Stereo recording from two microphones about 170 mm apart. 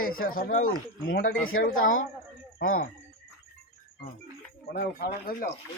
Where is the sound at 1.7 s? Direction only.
50° left (ahead or behind).